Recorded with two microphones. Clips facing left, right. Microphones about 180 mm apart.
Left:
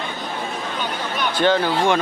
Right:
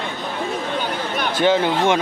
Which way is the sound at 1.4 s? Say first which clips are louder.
Right 1 dB; 20° right (ahead or behind).